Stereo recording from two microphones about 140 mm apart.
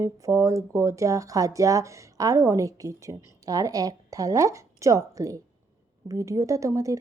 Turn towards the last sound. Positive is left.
turn(degrees=-25)  # may be behind; listen again after turning